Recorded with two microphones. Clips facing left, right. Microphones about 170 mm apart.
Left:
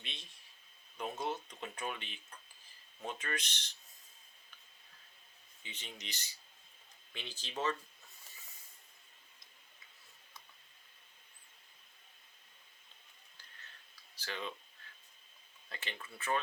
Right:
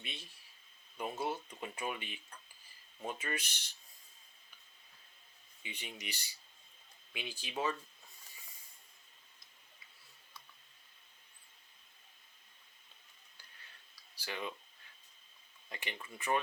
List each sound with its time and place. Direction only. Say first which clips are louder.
0.0 s a sound: right 3 dB; 5° right (ahead or behind)
0.9 s speech: right 1 dB; 10° right (ahead or behind)
5.6 s speech: right 3 dB; 10° right (ahead or behind)
14.2 s speech: right 1 dB; 10° right (ahead or behind)
15.7 s speech: right 1 dB; 15° right (ahead or behind)